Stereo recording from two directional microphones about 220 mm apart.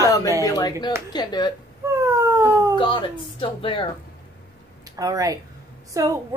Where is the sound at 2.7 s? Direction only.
20° left (ahead or behind).